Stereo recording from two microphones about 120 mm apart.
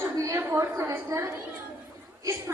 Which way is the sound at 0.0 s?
25° right (ahead or behind).